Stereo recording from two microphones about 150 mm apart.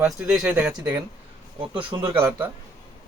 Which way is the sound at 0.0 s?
5° right (ahead or behind).